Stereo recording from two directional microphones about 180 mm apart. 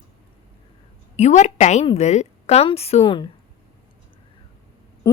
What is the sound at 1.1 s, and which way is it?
A woman's voice, 40° left (ahead or behind).